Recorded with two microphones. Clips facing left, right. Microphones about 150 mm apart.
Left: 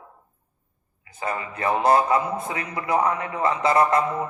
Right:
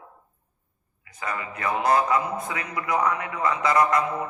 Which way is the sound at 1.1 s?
30° left (ahead or behind).